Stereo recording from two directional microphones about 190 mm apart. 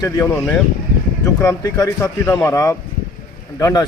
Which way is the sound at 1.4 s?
15° left (ahead or behind).